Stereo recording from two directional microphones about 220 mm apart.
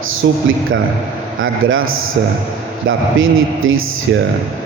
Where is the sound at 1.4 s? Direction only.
65° right (ahead or behind).